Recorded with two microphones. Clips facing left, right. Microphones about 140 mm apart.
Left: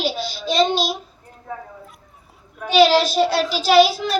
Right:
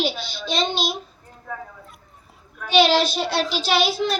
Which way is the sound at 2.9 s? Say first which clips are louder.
Left 4 dB; 5° left (ahead or behind).